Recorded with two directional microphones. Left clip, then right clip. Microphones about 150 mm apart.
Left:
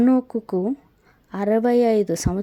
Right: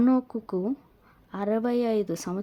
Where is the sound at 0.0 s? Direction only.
25° left (ahead or behind).